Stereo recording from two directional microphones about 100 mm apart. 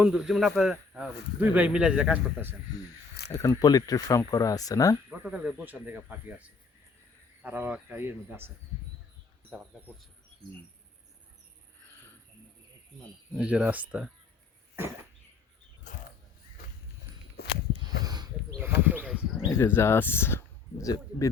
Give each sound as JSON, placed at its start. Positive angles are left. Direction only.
{"t": 0.0, "sound": "speech", "side_deg": -10}
{"t": 3.3, "sound": "speech", "side_deg": 35}
{"t": 5.0, "sound": "a man's voice", "side_deg": -15}
{"t": 13.3, "sound": "speech", "side_deg": -10}
{"t": 17.8, "sound": "a sound", "side_deg": -45}
{"t": 18.6, "sound": "speech", "side_deg": -20}
{"t": 19.5, "sound": "speech", "side_deg": 25}